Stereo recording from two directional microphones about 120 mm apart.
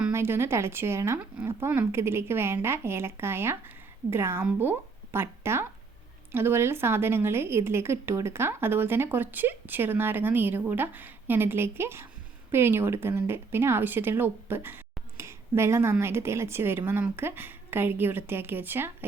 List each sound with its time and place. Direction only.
0.1 s a woman's voice: 20° right (ahead or behind)